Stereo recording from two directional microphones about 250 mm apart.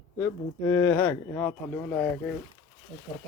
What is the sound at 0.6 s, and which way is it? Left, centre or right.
Speech, centre.